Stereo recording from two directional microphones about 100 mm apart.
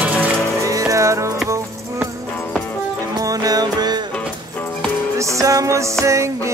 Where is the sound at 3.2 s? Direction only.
35° right (ahead or behind).